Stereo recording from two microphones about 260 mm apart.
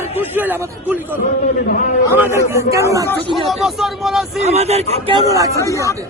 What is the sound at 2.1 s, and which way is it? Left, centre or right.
Speech, centre.